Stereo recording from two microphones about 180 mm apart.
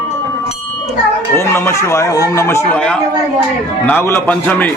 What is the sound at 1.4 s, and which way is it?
Speech, 15° left (ahead or behind).